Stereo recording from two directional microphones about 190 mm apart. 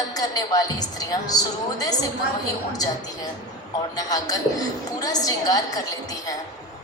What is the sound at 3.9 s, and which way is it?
A woman's voice, 20° left (ahead or behind).